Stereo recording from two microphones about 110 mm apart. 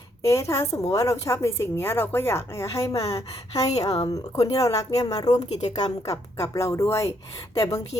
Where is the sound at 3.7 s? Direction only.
70° left (ahead or behind).